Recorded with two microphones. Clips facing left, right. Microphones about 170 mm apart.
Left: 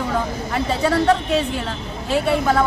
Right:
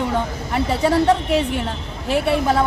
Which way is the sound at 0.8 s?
25° right (ahead or behind).